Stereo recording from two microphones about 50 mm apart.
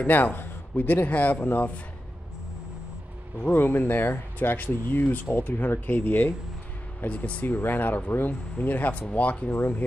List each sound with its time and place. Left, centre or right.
0.0 s a man's voice: left
3.5 s speech: left
7.1 s speech: left
7.4 s speech: left